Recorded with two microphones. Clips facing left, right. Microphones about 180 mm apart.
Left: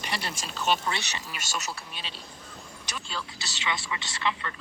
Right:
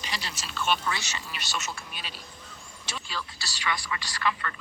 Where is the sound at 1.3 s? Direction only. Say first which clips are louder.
Even; 45° left (ahead or behind); by 2.2 s 30° left (ahead or behind).